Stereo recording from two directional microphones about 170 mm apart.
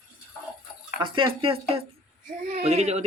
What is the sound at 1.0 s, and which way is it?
A man's voice, 30° right (ahead or behind).